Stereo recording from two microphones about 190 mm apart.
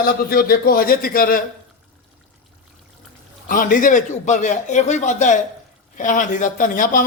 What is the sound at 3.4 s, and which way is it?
A man's voice, 45° left (ahead or behind).